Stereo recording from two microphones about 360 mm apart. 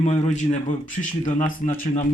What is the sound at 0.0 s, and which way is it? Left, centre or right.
Speech, centre.